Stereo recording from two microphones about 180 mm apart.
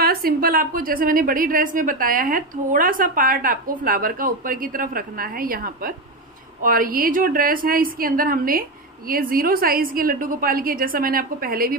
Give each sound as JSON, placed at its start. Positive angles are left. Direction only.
{"t": 0.0, "sound": "a woman's voice", "side_deg": -55}